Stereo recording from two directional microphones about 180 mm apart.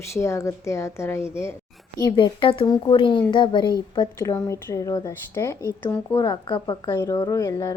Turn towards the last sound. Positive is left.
turn(degrees=20)  # may be behind; listen again after turning